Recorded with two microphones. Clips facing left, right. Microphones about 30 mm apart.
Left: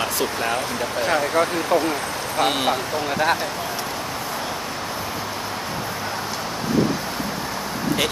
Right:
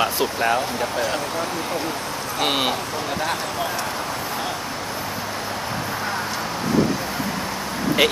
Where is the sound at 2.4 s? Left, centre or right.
Centre.